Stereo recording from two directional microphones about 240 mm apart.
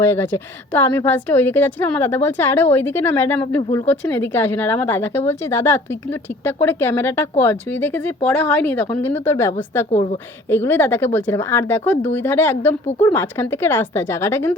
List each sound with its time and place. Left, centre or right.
0.0 s speech: centre
9.9 s a woman's voice: left
10.5 s speech: centre